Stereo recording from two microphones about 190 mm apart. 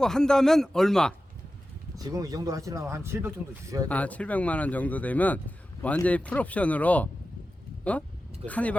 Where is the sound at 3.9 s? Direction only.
5° left (ahead or behind).